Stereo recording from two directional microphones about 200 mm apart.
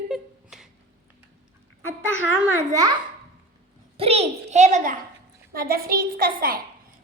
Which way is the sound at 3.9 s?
30° right (ahead or behind).